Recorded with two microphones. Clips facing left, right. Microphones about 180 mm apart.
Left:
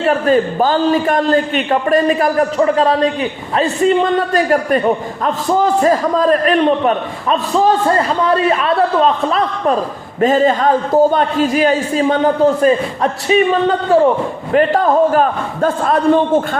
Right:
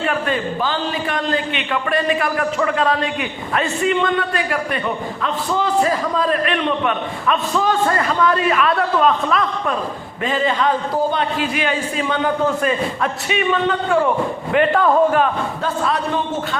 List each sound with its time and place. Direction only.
0.0 s a man's voice: 40° left (ahead or behind)
10.2 s a man's voice: 45° left (ahead or behind)